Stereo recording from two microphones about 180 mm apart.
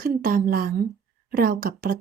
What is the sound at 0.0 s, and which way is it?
Speech, 50° right (ahead or behind).